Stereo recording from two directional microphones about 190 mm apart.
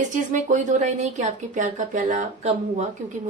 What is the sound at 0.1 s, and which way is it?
Speech, 40° right (ahead or behind).